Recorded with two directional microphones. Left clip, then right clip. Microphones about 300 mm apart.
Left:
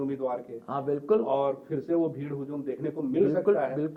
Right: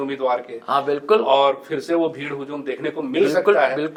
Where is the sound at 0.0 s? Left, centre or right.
Centre.